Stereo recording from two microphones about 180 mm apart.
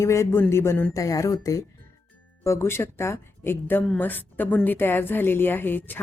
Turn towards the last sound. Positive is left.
turn(degrees=10)  # may be behind; listen again after turning